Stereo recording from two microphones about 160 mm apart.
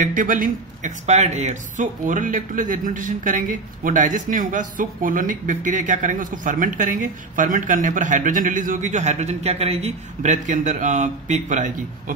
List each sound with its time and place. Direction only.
0.0 s speech: 55° right (ahead or behind)